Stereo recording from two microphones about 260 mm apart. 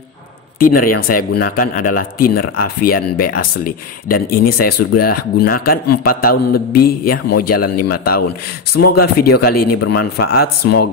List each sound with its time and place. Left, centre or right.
0.6 s a man's voice: left